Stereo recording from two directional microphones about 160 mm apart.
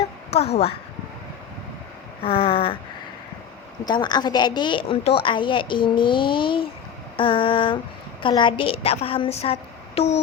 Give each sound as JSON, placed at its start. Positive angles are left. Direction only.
{"t": 0.3, "sound": "a woman's voice", "side_deg": 40}
{"t": 2.2, "sound": "a woman's voice", "side_deg": 35}
{"t": 3.8, "sound": "a woman's voice", "side_deg": 25}